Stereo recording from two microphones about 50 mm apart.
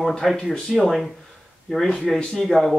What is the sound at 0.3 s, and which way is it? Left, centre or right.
Speech, centre.